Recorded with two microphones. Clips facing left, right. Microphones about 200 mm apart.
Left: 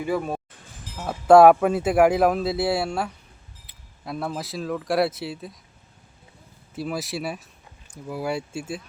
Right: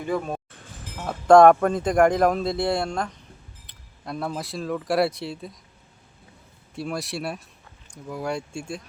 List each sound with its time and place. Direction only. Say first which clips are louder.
0.0 s speech: left 1 dB; 5° left (ahead or behind)
6.7 s speech: left 1 dB; centre (ahead or behind)